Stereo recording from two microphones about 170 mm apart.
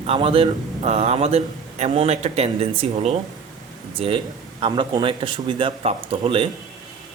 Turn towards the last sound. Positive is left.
turn(degrees=-30)  # may be behind; listen again after turning